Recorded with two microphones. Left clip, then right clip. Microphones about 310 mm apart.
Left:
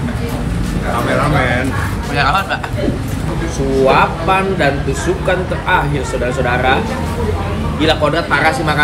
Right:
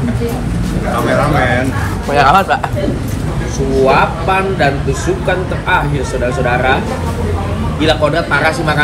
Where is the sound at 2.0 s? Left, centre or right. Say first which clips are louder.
Right 6 dB; centre.